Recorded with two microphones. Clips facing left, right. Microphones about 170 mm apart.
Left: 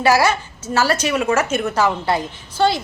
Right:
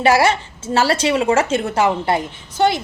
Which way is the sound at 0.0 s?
25° right (ahead or behind).